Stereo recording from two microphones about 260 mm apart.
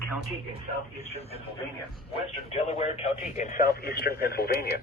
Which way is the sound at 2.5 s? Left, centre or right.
Left.